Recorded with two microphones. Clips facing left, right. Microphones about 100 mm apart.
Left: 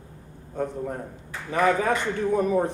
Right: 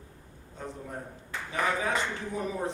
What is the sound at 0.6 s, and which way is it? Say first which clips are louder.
A man's voice: left 10 dB; 55° left (ahead or behind).